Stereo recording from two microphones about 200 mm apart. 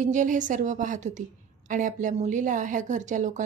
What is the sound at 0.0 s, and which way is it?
A woman's voice, 40° right (ahead or behind).